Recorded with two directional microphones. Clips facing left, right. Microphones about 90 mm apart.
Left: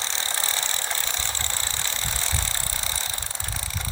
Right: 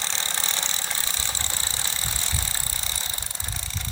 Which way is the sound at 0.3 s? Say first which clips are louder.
Left 1 dB; 25° right (ahead or behind).